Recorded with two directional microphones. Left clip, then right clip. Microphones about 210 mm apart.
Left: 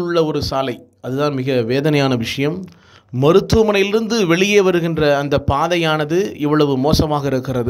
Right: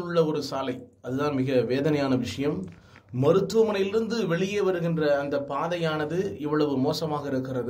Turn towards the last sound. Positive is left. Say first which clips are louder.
# left 10 dB
turn(degrees=40)  # may be behind; listen again after turning